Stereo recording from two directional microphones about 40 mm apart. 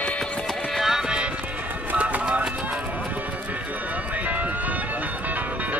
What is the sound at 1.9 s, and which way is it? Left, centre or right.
Music, right.